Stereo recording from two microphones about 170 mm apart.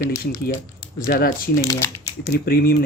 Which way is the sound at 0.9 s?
60° left (ahead or behind).